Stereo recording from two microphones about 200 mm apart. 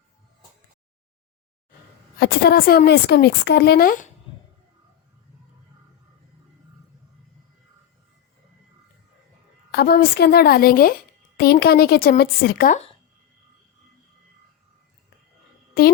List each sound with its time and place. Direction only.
2.1 s a woman's voice: 50° left (ahead or behind)
9.7 s a woman's voice: 50° left (ahead or behind)
15.8 s a woman's voice: 50° left (ahead or behind)